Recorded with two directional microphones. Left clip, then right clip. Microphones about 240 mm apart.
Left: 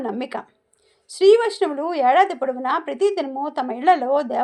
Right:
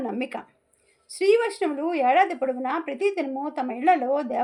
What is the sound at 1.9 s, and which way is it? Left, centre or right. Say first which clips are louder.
A woman's voice: left 4 dB; left.